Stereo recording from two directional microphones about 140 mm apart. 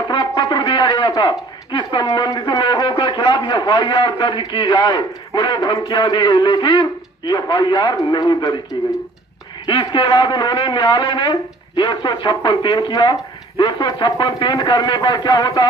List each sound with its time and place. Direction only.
0.1 s speech: 30° left (ahead or behind)
9.7 s speech: 35° left (ahead or behind)